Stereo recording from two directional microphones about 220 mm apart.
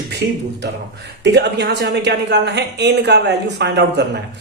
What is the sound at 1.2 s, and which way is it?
Speech, 50° right (ahead or behind).